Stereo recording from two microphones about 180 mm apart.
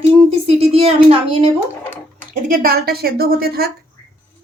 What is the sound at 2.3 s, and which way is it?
A woman's voice, 50° right (ahead or behind).